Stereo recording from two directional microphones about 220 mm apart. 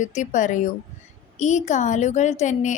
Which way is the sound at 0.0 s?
35° left (ahead or behind).